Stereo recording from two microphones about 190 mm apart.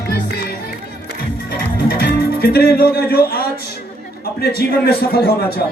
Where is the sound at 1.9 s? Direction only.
55° left (ahead or behind).